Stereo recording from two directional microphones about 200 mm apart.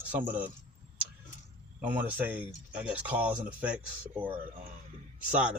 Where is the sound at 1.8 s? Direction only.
10° right (ahead or behind).